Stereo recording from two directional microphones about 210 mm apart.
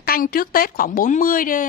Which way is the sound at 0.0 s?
45° left (ahead or behind).